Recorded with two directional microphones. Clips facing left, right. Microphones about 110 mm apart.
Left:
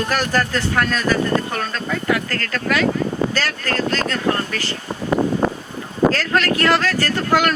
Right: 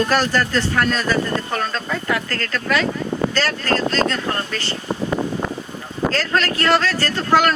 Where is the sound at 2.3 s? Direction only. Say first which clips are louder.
Even; 35° right (ahead or behind).